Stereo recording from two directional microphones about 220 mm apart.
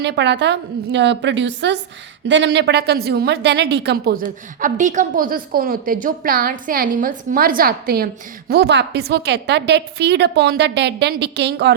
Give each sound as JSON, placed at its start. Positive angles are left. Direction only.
{"t": 0.0, "sound": "a woman's voice", "side_deg": -50}
{"t": 4.6, "sound": "a woman's voice", "side_deg": -35}